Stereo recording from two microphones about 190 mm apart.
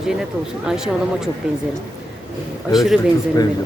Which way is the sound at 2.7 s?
Centre (ahead or behind).